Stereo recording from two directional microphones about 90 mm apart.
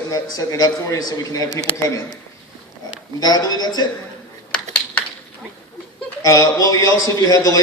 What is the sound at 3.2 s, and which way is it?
Speech, 45° left (ahead or behind).